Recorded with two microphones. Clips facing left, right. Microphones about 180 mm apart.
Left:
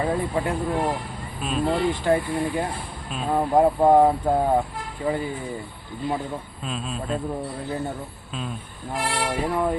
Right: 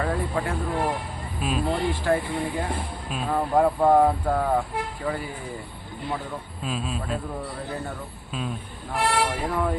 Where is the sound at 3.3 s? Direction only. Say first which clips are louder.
Left 3 dB; 20° left (ahead or behind).